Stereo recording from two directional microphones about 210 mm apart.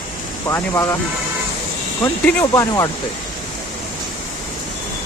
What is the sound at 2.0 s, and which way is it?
Speech, 15° left (ahead or behind).